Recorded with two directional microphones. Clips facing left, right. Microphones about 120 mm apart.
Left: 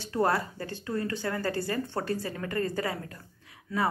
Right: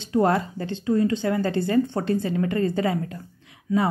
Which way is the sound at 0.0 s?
20° right (ahead or behind).